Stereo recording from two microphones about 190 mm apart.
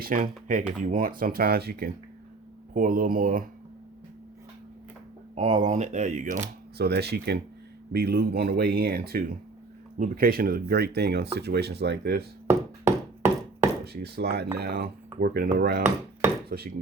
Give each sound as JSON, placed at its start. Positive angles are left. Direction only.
{"t": 0.0, "sound": "speech", "side_deg": -45}
{"t": 5.3, "sound": "speech", "side_deg": -35}
{"t": 6.7, "sound": "speech", "side_deg": -60}
{"t": 12.5, "sound": "a sound", "side_deg": -15}
{"t": 13.8, "sound": "speech", "side_deg": -55}